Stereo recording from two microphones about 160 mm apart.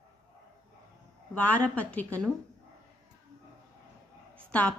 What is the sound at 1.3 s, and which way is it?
A woman's voice, 10° left (ahead or behind).